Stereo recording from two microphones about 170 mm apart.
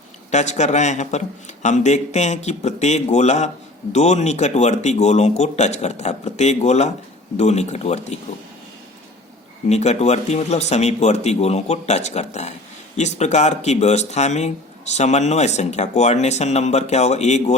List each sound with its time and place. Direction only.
0.3 s speech: 45° left (ahead or behind)
9.6 s speech: 40° left (ahead or behind)